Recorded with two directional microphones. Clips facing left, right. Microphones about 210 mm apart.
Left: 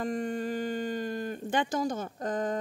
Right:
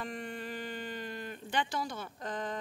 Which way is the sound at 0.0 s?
45° left (ahead or behind).